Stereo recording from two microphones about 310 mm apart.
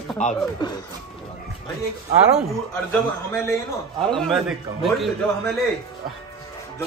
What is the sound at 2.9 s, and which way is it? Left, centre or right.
A man's voice, centre.